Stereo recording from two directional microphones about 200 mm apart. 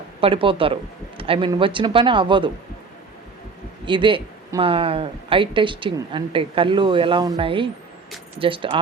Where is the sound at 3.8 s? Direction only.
25° right (ahead or behind).